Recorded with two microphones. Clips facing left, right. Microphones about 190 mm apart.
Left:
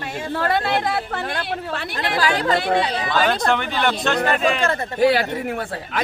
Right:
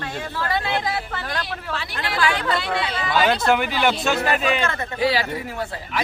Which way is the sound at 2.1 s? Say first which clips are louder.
Left 3 dB; 40° left (ahead or behind).